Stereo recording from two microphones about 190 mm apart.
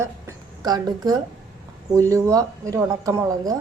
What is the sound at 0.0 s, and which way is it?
Speech, 20° right (ahead or behind).